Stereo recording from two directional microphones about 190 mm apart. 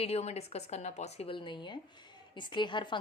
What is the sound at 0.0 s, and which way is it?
A woman's voice, 35° left (ahead or behind).